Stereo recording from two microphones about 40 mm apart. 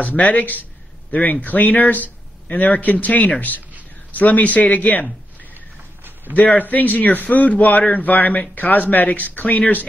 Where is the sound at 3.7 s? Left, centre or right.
Right.